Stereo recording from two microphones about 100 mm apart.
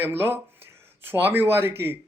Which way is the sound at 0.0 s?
20° right (ahead or behind).